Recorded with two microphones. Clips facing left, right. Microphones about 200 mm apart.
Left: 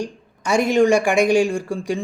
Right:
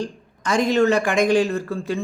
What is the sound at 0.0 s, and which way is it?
A man's voice, 10° left (ahead or behind).